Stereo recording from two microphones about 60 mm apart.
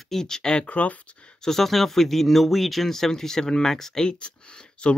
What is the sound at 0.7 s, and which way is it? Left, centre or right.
Speech, left.